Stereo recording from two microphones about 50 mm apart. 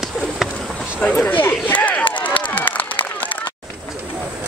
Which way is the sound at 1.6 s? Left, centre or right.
Left.